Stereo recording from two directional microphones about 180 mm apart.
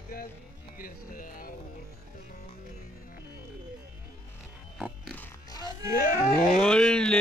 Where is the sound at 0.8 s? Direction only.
55° left (ahead or behind).